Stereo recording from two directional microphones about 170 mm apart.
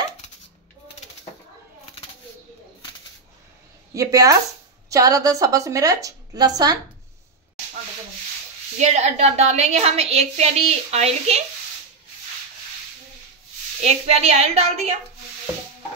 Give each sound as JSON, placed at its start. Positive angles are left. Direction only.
{"t": 3.9, "sound": "a woman's voice", "side_deg": -20}
{"t": 8.7, "sound": "a woman's voice", "side_deg": -40}
{"t": 13.8, "sound": "a woman's voice", "side_deg": -40}